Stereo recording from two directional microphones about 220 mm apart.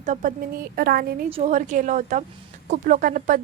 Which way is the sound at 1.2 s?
30° right (ahead or behind).